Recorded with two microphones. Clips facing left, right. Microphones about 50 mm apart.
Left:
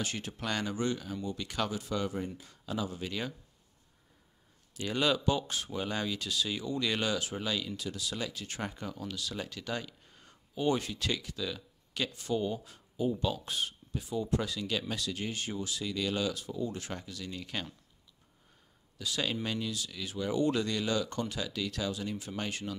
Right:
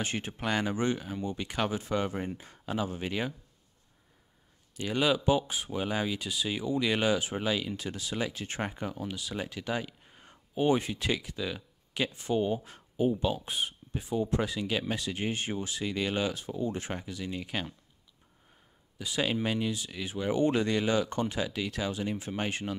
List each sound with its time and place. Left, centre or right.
0.0 s speech: right
4.7 s speech: centre; by 12.7 s right
12.7 s a sound: right
13.1 s speech: centre
18.9 s speech: centre